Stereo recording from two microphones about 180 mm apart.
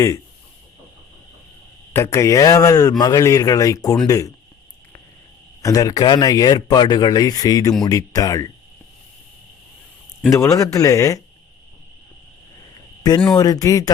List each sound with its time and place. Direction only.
1.9 s speech: 15° left (ahead or behind)
5.6 s speech: 20° left (ahead or behind)
10.2 s speech: 15° left (ahead or behind)
13.0 s speech: 20° left (ahead or behind)